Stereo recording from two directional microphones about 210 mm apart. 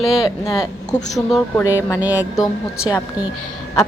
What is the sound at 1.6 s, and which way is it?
Speech, 15° left (ahead or behind).